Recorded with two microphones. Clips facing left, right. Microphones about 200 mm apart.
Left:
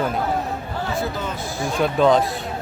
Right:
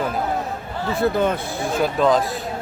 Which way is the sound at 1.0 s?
60° right (ahead or behind).